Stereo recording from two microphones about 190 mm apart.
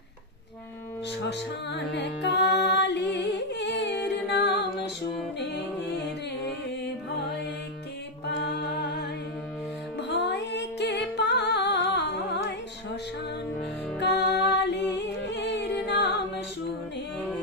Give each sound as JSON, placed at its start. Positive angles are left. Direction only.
{"t": 1.2, "sound": "music", "side_deg": 65}
{"t": 8.4, "sound": "music", "side_deg": 60}
{"t": 14.0, "sound": "music", "side_deg": 65}